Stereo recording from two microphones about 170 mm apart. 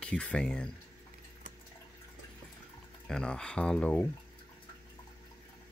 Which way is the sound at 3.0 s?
5° left (ahead or behind).